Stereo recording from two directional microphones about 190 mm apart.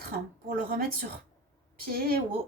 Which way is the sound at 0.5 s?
50° right (ahead or behind).